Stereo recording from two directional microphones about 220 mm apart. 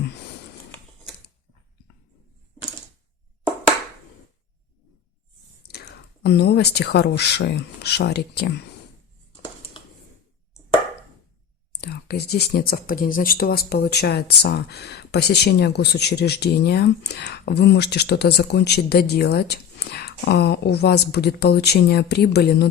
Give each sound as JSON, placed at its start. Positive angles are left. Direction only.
{"t": 3.4, "sound": "a sound", "side_deg": 10}
{"t": 5.6, "sound": "speech", "side_deg": 45}
{"t": 11.7, "sound": "speech", "side_deg": 45}